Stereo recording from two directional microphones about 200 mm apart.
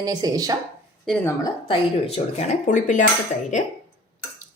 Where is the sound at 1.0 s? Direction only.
5° left (ahead or behind).